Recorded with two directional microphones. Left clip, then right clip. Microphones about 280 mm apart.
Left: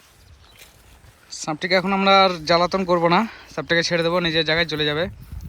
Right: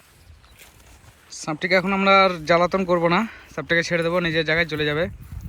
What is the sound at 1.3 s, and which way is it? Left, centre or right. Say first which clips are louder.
Speech: even; centre.